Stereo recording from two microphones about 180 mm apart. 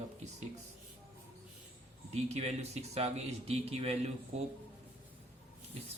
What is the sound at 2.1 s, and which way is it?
Speech, 35° right (ahead or behind).